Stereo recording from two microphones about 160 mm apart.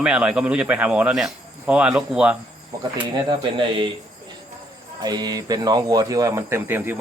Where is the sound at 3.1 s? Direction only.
30° right (ahead or behind).